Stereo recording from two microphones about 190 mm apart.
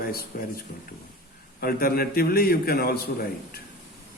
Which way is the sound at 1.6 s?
50° left (ahead or behind).